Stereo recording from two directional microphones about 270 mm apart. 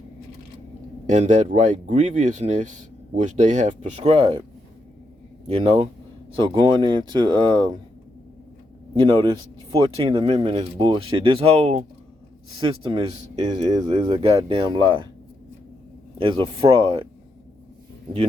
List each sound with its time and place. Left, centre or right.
1.0 s speech: right
5.5 s speech: right
9.0 s speech: centre
16.1 s speech: centre